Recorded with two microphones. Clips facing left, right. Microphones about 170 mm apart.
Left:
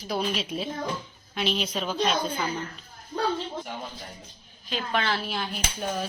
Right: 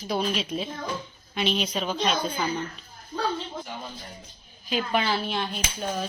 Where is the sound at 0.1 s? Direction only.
5° left (ahead or behind).